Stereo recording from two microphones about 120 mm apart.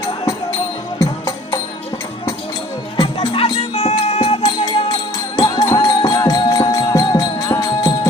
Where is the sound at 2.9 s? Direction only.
40° left (ahead or behind); by 4.4 s 60° left (ahead or behind).